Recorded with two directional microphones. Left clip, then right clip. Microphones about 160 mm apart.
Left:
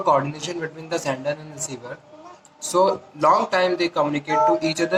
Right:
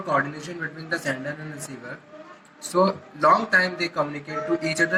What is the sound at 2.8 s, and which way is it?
Speech, 30° left (ahead or behind).